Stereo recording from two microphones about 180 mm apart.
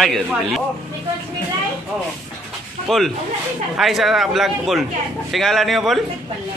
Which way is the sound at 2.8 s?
Centre (ahead or behind).